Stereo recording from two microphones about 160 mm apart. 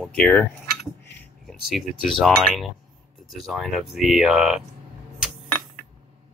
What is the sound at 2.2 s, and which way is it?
Speech, centre (ahead or behind).